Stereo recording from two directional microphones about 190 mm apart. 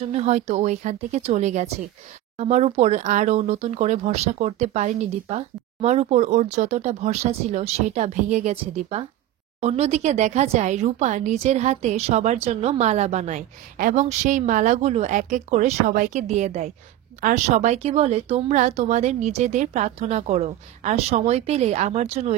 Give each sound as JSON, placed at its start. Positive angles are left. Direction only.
{"t": 0.0, "sound": "speech", "side_deg": -35}